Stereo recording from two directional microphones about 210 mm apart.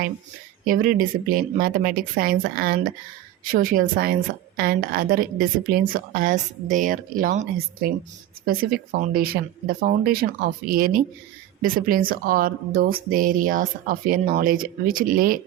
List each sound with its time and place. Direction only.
0.6 s a woman's voice: 40° right (ahead or behind)
8.4 s a woman's voice: 45° right (ahead or behind)